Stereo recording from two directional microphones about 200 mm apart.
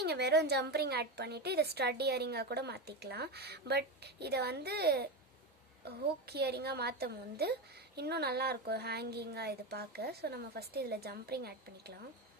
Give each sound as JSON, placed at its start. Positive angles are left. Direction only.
{"t": 0.0, "sound": "a woman's voice", "side_deg": -55}